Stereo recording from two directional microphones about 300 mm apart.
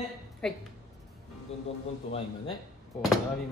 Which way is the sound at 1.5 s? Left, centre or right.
Left.